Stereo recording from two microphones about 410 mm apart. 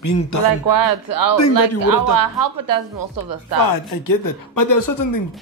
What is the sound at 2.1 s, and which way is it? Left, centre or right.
Speech, right.